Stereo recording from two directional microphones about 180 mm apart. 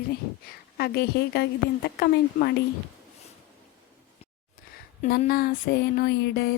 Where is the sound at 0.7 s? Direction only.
60° left (ahead or behind).